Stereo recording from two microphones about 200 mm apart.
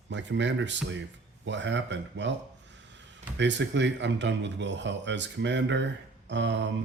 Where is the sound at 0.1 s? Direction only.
65° right (ahead or behind).